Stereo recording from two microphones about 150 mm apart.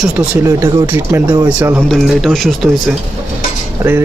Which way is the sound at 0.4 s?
20° right (ahead or behind).